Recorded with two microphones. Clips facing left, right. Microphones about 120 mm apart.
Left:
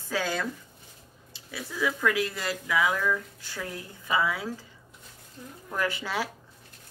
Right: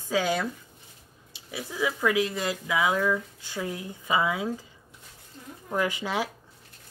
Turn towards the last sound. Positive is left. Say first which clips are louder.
# right 2 dB
turn(degrees=-15)  # may be behind; listen again after turning